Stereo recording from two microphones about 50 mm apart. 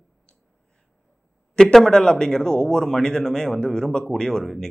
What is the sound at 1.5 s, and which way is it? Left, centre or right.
Speech, centre.